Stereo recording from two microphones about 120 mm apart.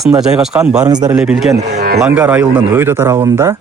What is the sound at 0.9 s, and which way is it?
Speech, 35° right (ahead or behind).